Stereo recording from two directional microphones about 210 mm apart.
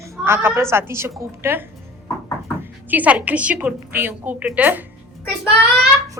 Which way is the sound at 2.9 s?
5° right (ahead or behind).